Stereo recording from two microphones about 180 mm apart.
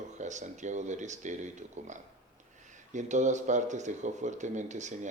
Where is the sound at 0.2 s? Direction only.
40° right (ahead or behind).